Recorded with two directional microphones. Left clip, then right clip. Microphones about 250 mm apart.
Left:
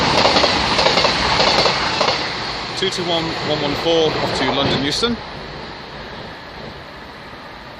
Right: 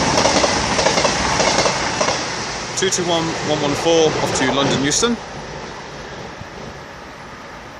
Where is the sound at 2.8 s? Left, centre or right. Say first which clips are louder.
Right 2 dB; centre.